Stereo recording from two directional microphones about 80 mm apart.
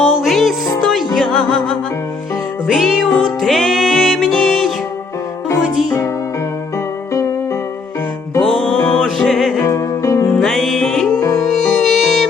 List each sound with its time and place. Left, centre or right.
0.0 s music: centre
7.1 s music: left
8.4 s music: centre
9.6 s music: left
10.4 s music: centre